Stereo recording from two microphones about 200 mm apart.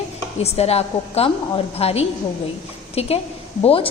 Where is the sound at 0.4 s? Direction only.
30° left (ahead or behind).